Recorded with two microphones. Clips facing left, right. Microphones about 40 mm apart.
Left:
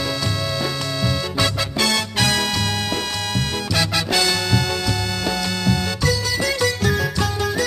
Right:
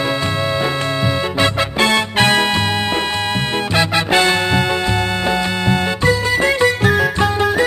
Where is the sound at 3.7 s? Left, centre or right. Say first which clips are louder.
Right 6 dB; right.